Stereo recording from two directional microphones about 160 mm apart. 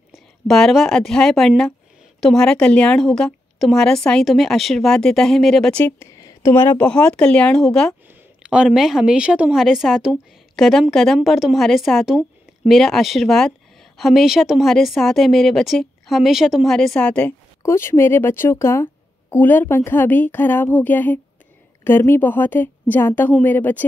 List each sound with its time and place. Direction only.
0.1 s a woman's voice: centre (ahead or behind)